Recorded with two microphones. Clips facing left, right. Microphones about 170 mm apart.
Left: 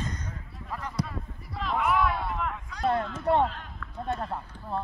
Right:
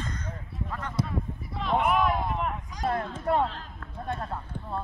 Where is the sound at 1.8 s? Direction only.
15° right (ahead or behind).